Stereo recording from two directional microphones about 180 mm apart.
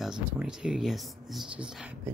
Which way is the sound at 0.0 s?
5° right (ahead or behind).